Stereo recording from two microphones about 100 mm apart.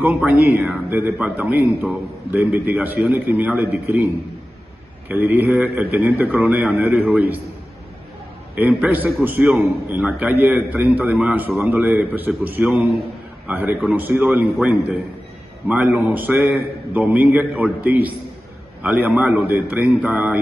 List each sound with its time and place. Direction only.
0.0 s a man's voice: 15° right (ahead or behind)
0.6 s a man's voice: centre (ahead or behind)
0.8 s a man's voice: 20° right (ahead or behind)
8.5 s a man's voice: 15° right (ahead or behind)